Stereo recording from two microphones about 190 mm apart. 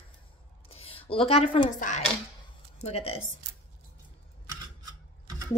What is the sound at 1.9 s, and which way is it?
Speech, 45° left (ahead or behind).